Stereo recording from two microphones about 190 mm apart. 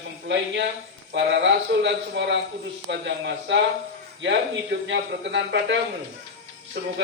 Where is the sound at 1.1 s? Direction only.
70° right (ahead or behind).